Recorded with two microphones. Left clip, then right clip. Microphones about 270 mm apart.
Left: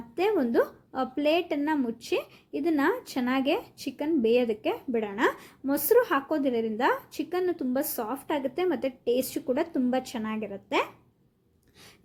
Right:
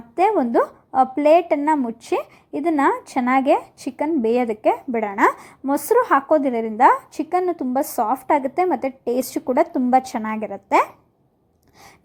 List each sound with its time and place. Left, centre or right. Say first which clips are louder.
0.2 s a woman's voice: right 8 dB; centre